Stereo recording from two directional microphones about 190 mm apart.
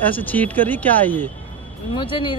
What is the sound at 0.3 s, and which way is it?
Speech, 10° left (ahead or behind).